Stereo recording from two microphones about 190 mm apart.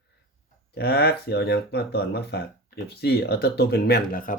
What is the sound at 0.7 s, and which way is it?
Speech, 60° left (ahead or behind).